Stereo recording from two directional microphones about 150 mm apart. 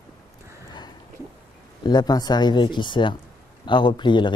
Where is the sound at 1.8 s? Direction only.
25° left (ahead or behind).